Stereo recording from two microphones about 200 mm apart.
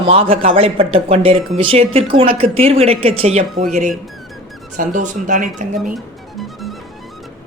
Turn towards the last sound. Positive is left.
turn(degrees=0)  # may be behind; listen again after turning